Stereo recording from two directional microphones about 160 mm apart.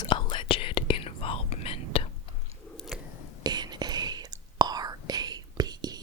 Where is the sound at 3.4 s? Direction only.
25° right (ahead or behind).